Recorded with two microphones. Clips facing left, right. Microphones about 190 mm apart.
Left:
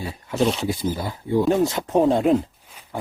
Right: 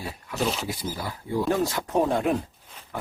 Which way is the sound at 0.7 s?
25° left (ahead or behind).